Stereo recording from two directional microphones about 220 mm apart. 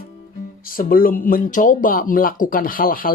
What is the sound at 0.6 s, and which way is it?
Speech, 40° left (ahead or behind).